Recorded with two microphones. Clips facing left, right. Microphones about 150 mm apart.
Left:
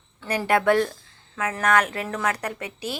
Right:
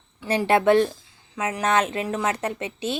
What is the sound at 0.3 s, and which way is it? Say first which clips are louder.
A woman's voice: right 2 dB; 25° right (ahead or behind).